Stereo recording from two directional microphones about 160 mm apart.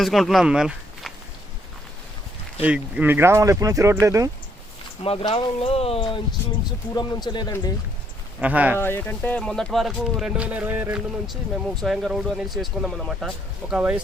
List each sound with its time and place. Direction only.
0.0 s speech: centre (ahead or behind)
2.6 s speech: 10° right (ahead or behind)
5.0 s a man's voice: 35° left (ahead or behind)
8.4 s speech: 10° right (ahead or behind)
8.8 s speech: 15° left (ahead or behind); by 14.0 s 5° right (ahead or behind)